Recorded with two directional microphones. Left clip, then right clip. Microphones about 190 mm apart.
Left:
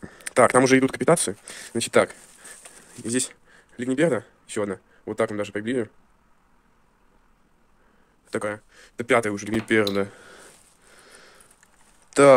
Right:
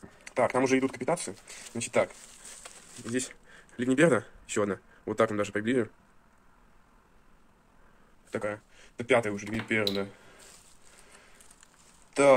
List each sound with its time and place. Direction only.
0.0 s speech: 65° left (ahead or behind)
3.4 s speech: 10° left (ahead or behind)
8.3 s speech: 45° left (ahead or behind)
12.1 s speech: 60° left (ahead or behind)